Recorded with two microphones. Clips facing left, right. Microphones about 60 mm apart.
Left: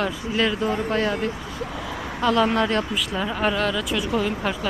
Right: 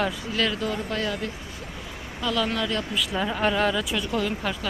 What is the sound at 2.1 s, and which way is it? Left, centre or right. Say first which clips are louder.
Speech: left 6 dB; left.